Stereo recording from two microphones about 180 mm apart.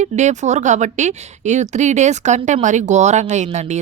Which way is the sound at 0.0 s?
40° right (ahead or behind).